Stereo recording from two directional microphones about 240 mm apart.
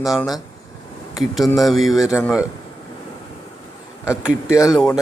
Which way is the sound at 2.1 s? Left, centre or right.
Centre.